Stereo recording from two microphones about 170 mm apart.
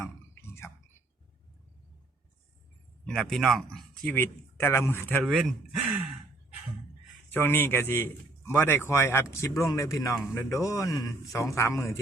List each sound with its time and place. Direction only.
3.1 s speech: centre (ahead or behind)
5.2 s speech: centre (ahead or behind)
7.3 s a man's voice: 15° left (ahead or behind)